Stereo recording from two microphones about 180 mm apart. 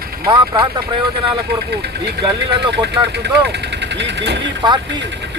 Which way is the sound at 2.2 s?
65° right (ahead or behind).